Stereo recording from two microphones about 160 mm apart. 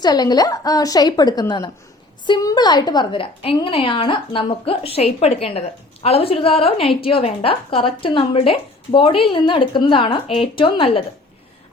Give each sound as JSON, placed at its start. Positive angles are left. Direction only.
{"t": 0.0, "sound": "a woman's voice", "side_deg": 25}